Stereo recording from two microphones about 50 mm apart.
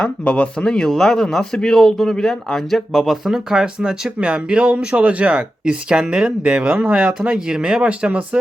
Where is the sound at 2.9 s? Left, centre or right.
Centre.